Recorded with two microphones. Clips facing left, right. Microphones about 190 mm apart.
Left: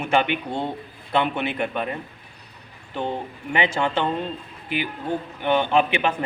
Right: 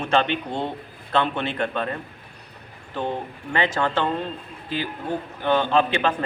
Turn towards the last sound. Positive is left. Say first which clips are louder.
# even
turn(degrees=15)  # may be behind; listen again after turning